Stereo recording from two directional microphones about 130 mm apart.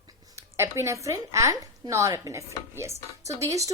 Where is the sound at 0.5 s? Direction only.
20° right (ahead or behind).